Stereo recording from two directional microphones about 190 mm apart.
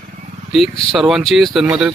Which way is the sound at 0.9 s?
Centre (ahead or behind).